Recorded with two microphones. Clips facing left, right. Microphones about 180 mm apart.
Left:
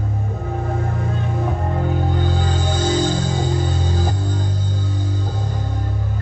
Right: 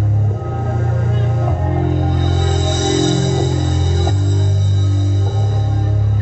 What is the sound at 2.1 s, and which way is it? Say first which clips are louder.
Music: right 3 dB; 45° right (ahead or behind).